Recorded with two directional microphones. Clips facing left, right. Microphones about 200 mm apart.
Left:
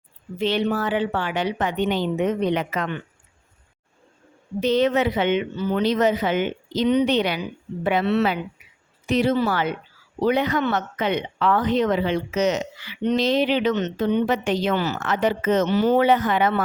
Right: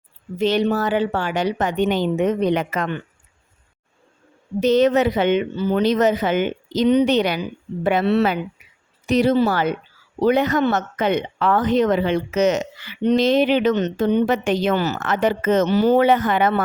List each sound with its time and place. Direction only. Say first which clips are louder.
0.3 s speech: right 4 dB; 40° right (ahead or behind)
4.6 s a woman's voice: right 4 dB; 45° right (ahead or behind)
5.8 s a woman's voice: right 2 dB; 45° right (ahead or behind)
16.0 s speech: right 2 dB; 50° right (ahead or behind)